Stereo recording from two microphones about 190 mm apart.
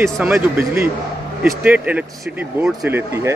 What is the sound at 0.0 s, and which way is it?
A man's voice, 10° right (ahead or behind).